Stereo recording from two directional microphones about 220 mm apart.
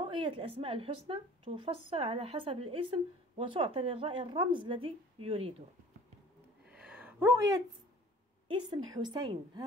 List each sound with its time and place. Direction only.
0.0 s a woman's voice: 20° right (ahead or behind)
6.7 s a sound: 5° right (ahead or behind)
8.5 s a woman's voice: 20° right (ahead or behind)